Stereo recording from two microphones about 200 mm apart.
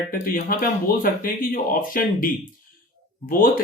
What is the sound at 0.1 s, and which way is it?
Speech, 45° left (ahead or behind).